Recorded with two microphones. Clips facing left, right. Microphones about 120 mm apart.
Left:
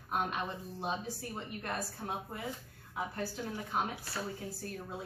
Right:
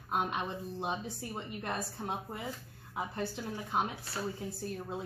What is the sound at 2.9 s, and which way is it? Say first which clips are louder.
Speech: right 1 dB; 20° right (ahead or behind).